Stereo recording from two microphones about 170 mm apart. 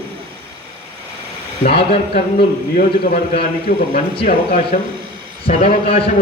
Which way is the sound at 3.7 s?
55° left (ahead or behind).